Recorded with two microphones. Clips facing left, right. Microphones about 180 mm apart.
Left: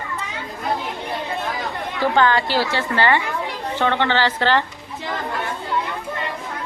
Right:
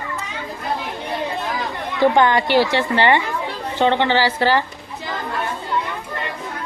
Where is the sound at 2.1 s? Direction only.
20° right (ahead or behind).